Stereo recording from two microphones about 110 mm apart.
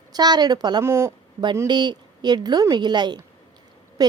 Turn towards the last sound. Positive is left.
turn(degrees=-35)  # may be behind; listen again after turning